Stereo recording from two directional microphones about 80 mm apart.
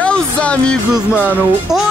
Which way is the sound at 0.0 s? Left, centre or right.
Centre.